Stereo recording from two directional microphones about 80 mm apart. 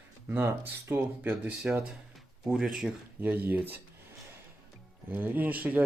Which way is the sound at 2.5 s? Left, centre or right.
Centre.